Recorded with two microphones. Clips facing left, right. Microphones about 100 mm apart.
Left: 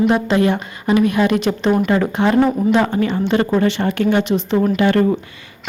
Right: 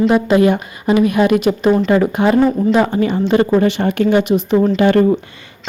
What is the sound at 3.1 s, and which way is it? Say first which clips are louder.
Speech: right 3 dB; 15° right (ahead or behind).